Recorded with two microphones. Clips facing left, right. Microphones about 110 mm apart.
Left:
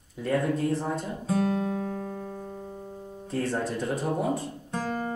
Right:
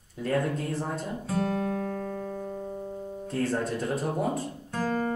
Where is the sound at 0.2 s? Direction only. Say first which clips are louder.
Left 2 dB; centre (ahead or behind).